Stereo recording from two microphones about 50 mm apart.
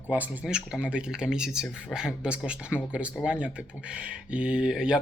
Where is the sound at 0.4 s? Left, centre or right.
Centre.